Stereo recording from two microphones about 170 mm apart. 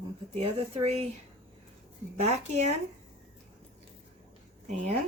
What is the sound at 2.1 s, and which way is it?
Speech, 40° right (ahead or behind).